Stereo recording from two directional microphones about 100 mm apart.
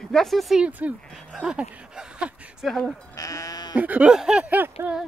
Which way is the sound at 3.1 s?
35° left (ahead or behind).